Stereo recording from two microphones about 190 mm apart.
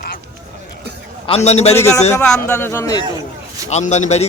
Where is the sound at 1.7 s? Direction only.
15° left (ahead or behind).